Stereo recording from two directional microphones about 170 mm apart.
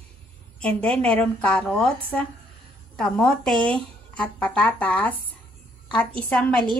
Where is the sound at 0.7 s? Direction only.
5° left (ahead or behind).